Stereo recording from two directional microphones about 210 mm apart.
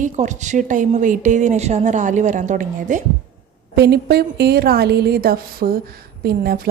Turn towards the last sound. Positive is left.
turn(degrees=-45)  # may be behind; listen again after turning